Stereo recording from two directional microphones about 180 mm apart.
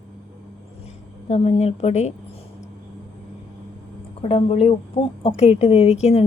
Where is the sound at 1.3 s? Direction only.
40° left (ahead or behind).